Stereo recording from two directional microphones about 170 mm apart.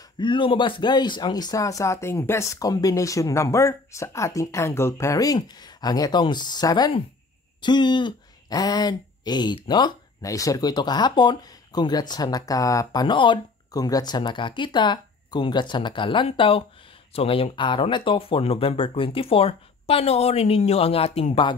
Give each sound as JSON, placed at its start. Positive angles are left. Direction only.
{"t": 0.2, "sound": "speech", "side_deg": 30}